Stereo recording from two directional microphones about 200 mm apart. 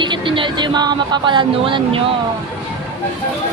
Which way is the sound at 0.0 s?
25° right (ahead or behind).